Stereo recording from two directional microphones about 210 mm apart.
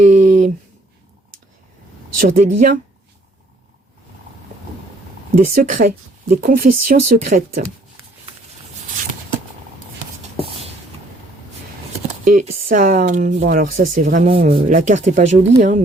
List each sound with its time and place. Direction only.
0.0 s a sound: 35° right (ahead or behind)
2.1 s speech: 40° right (ahead or behind)
5.5 s speech: 40° right (ahead or behind)
12.2 s speech: 40° right (ahead or behind)
14.3 s speech: 25° right (ahead or behind)